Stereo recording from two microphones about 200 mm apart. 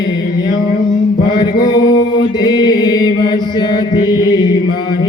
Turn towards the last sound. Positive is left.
turn(degrees=20)  # may be behind; listen again after turning